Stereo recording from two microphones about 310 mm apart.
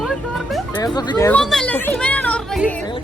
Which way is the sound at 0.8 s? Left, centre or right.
Centre.